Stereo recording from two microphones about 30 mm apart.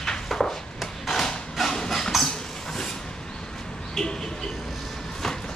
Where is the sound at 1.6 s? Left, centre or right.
Centre.